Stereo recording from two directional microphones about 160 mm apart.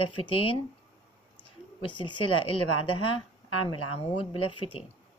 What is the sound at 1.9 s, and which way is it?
A woman's voice, 30° left (ahead or behind).